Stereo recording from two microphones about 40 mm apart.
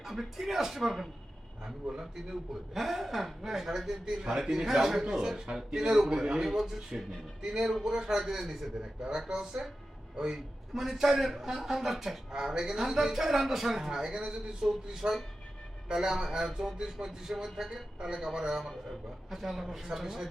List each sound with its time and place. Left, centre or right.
0.0 s a man's voice: centre
8.8 s a man's voice: centre
15.9 s a man's voice: centre
19.3 s a man's voice: centre